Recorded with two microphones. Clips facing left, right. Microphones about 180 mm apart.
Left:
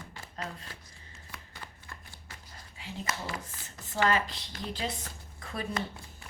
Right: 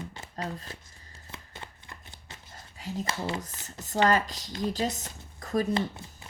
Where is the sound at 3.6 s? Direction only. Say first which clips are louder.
Right 4 dB; 40° right (ahead or behind).